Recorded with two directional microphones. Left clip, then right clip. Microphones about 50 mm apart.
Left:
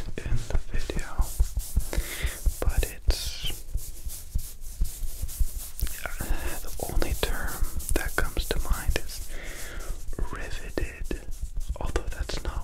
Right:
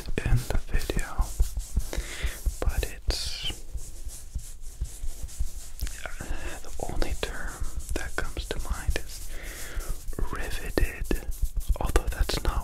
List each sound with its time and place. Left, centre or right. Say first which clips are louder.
0.1 s whispering: right 7 dB; right
0.4 s whispering: right 3 dB; right; by 1.2 s centre
1.8 s a sound: left 2 dB; centre
2.3 s whispering: left 1 dB; centre
5.8 s whispering: left 2 dB; centre
7.2 s whispering: left 3 dB; left
8.8 s whispering: left 2 dB; centre
9.4 s whispering: right 1 dB; centre
10.3 s whispering: right 4 dB; right